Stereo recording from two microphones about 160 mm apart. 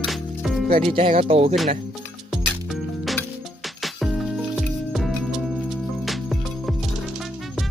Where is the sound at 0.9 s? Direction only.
35° right (ahead or behind).